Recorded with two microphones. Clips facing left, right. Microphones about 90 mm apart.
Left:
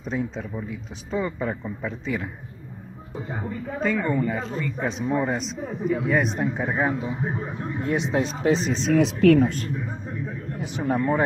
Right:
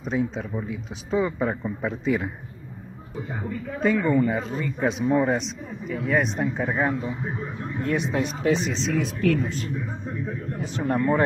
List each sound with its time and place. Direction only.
0.0 s a man's voice: 5° right (ahead or behind)
3.3 s a man's voice: 5° left (ahead or behind)
4.3 s a man's voice: 10° right (ahead or behind)
7.0 s speech: 20° left (ahead or behind)
8.7 s speech: 55° left (ahead or behind)
9.0 s speech: 75° left (ahead or behind)
10.8 s a man's voice: 5° left (ahead or behind)